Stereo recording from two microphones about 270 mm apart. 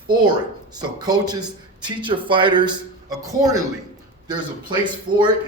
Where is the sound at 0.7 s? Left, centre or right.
Centre.